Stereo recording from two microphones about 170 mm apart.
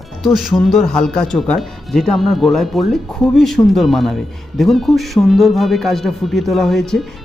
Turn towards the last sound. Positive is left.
turn(degrees=0)  # may be behind; listen again after turning